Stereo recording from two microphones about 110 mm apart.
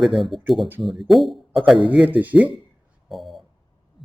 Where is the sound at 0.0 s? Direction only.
Centre (ahead or behind).